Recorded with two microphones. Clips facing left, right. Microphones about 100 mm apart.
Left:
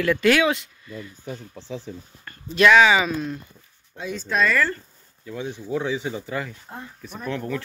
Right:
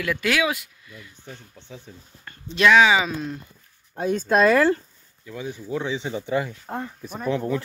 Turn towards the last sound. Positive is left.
turn(degrees=-20)  # may be behind; listen again after turning